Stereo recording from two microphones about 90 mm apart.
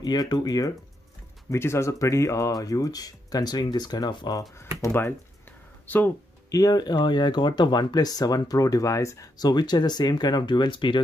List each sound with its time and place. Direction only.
0.0 s speech: 50° left (ahead or behind)
1.5 s speech: 30° left (ahead or behind); by 4.4 s 50° left (ahead or behind)
4.8 s speech: 30° left (ahead or behind)
6.5 s speech: 45° left (ahead or behind)
9.4 s speech: 50° left (ahead or behind)